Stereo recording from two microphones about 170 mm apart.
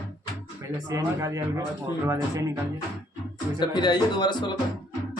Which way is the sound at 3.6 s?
25° left (ahead or behind).